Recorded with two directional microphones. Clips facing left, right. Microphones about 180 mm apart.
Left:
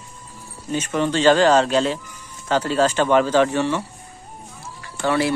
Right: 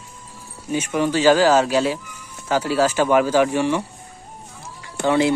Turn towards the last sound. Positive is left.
turn(degrees=-20)  # may be behind; listen again after turning